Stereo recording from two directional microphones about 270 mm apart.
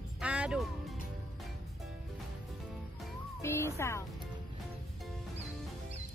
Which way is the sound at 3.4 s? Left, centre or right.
Centre.